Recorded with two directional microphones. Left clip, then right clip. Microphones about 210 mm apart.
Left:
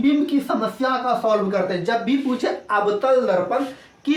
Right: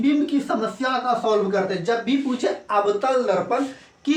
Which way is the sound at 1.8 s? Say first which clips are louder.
Left 1 dB; 15° right (ahead or behind).